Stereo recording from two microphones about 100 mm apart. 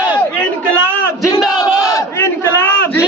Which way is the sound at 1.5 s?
35° left (ahead or behind).